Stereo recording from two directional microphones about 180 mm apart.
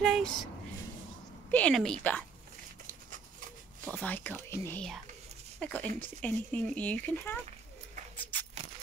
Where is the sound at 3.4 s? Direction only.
50° right (ahead or behind).